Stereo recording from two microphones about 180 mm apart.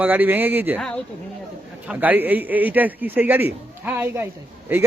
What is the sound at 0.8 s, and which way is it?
Speech, 5° left (ahead or behind).